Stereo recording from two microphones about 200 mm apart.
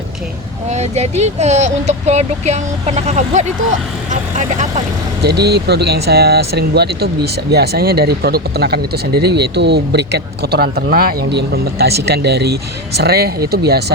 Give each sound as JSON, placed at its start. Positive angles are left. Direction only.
{"t": 0.7, "sound": "speech", "side_deg": -35}
{"t": 5.2, "sound": "speech", "side_deg": -55}